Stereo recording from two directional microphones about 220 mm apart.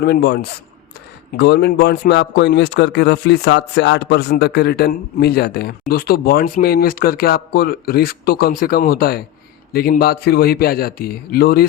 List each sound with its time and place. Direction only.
0.0 s a man's voice: 50° left (ahead or behind)